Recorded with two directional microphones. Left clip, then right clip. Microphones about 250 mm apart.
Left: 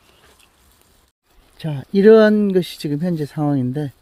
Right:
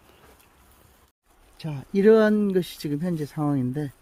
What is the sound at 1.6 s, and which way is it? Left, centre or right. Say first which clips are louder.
Speech: left 7 dB; left.